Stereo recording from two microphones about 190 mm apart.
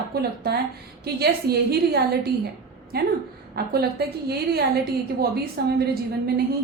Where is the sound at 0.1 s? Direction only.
55° right (ahead or behind).